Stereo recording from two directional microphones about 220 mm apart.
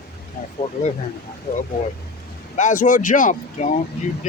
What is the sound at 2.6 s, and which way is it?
Speech, 35° left (ahead or behind).